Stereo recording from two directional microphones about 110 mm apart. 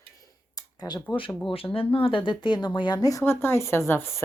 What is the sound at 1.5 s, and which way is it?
A woman's voice, 55° left (ahead or behind).